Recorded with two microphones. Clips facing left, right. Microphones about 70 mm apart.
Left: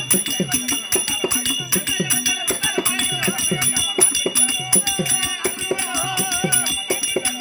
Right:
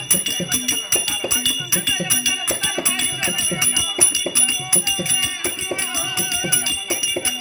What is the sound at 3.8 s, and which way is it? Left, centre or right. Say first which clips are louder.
Music: left 2 dB; left.